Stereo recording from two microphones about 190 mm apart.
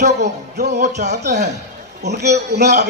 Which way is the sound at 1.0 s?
60° right (ahead or behind).